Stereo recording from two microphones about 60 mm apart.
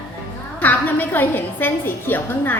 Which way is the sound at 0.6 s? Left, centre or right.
Left.